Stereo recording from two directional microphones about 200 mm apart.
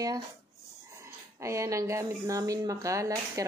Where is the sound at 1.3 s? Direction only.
15° right (ahead or behind).